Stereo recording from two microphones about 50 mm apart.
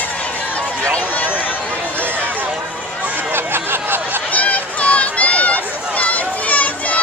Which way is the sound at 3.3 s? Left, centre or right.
Right.